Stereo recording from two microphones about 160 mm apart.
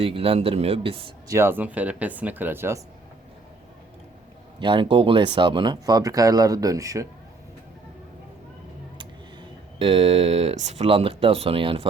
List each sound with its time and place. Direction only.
0.0 s speech: 35° right (ahead or behind)
1.3 s speech: 15° right (ahead or behind)
4.6 s speech: 30° right (ahead or behind)
9.7 s speech: 35° right (ahead or behind)